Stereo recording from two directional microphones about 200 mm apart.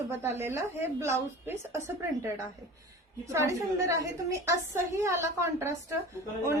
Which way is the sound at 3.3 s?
15° right (ahead or behind).